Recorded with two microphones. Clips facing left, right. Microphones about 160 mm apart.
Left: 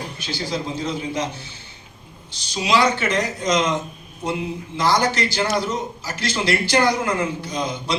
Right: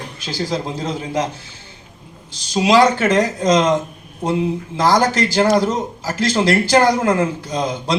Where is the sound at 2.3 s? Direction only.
90° right.